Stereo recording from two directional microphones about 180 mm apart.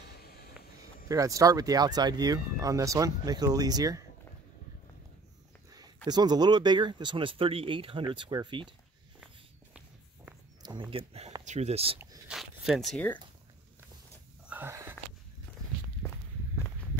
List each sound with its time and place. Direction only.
0.2 s vehicle: 60° left (ahead or behind)
1.0 s speech: 20° right (ahead or behind)
6.0 s speech: 25° right (ahead or behind)
10.6 s speech: 25° right (ahead or behind)
12.3 s zipper: centre (ahead or behind)
14.5 s a sound: 15° right (ahead or behind)